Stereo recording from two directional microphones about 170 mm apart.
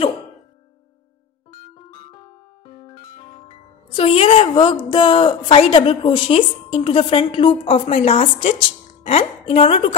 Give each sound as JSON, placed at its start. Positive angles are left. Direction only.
{"t": 2.6, "sound": "music", "side_deg": 30}
{"t": 3.9, "sound": "a woman's voice", "side_deg": 35}